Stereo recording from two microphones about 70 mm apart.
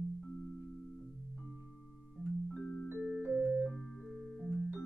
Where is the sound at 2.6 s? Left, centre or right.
Left.